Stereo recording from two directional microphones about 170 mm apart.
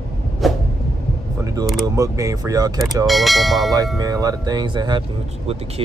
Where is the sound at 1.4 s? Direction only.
20° right (ahead or behind).